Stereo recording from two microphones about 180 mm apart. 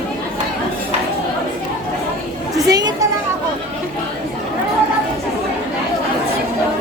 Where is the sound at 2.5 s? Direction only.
20° right (ahead or behind).